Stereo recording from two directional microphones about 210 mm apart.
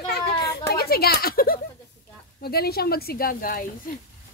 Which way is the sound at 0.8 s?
45° left (ahead or behind).